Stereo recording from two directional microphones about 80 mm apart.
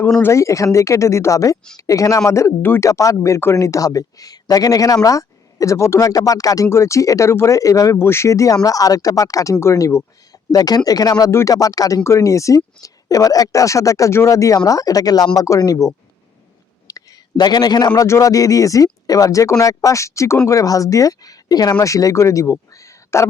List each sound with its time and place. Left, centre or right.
0.2 s speech: left
2.9 s speech: left
6.7 s speech: left
7.9 s speech: left
10.5 s speech: left
11.3 s speech: left
11.5 s speech: left
12.0 s speech: left
16.8 s a sound: left
18.0 s speech: left
22.7 s a sound: left